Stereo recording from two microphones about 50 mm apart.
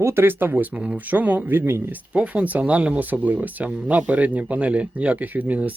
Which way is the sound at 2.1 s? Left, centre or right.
Centre.